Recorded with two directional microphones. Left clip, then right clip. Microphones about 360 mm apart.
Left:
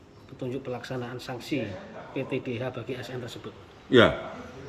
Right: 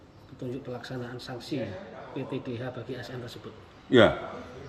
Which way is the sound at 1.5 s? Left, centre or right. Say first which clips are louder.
Left 2 dB; centre.